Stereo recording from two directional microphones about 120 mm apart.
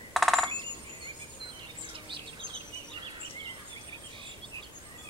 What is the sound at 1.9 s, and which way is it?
Bird, 45° right (ahead or behind).